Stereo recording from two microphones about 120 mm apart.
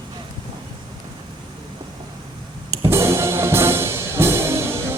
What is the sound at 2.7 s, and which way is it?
Music, 20° right (ahead or behind).